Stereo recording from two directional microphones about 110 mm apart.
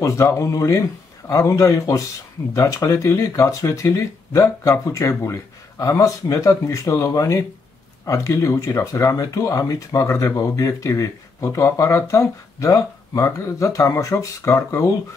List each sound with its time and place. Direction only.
0.0 s speech: 25° left (ahead or behind)